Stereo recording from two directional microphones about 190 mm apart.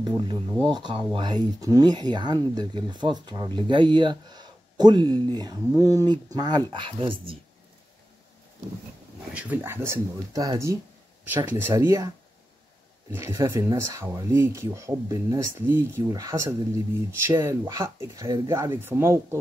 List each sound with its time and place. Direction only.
0.0 s speech: 25° right (ahead or behind)
9.3 s speech: 5° right (ahead or behind)
13.1 s speech: 15° right (ahead or behind)